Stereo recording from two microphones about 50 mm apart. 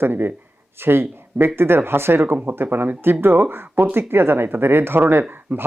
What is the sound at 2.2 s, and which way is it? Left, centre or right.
Speech, right.